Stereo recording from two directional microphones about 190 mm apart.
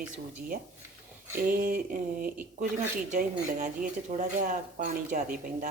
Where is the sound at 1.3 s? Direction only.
45° right (ahead or behind).